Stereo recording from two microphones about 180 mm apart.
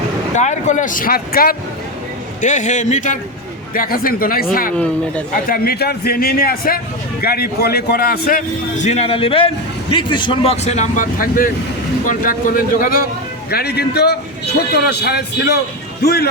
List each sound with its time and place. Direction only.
0.3 s speech: 40° left (ahead or behind)
2.4 s a man's voice: 45° left (ahead or behind); by 15.5 s 65° left (ahead or behind)